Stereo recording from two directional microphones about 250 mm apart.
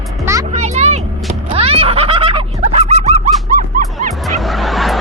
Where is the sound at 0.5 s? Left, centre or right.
Right.